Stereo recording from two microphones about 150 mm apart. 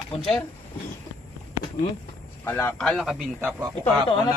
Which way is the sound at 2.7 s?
Centre (ahead or behind).